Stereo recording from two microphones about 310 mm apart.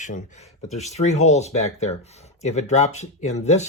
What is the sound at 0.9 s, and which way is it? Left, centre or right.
Speech, left.